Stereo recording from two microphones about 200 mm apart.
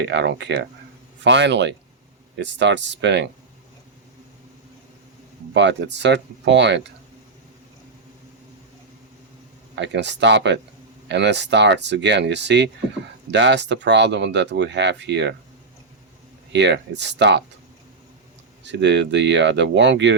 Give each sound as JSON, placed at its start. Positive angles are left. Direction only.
{"t": 0.0, "sound": "speech", "side_deg": -60}
{"t": 5.5, "sound": "speech", "side_deg": -60}
{"t": 9.7, "sound": "speech", "side_deg": -60}
{"t": 16.5, "sound": "speech", "side_deg": -60}
{"t": 18.6, "sound": "speech", "side_deg": -60}